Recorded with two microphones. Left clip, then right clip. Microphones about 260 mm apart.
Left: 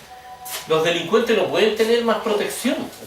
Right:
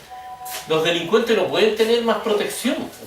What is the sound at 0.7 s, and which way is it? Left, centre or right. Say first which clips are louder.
Speech: even; centre.